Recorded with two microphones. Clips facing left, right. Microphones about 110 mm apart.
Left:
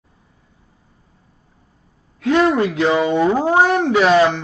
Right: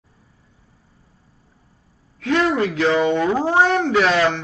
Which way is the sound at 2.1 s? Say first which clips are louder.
Left 4 dB; 30° left (ahead or behind).